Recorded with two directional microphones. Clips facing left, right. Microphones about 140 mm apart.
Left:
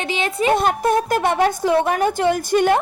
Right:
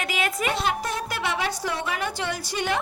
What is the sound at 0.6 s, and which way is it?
A woman's voice, 50° left (ahead or behind).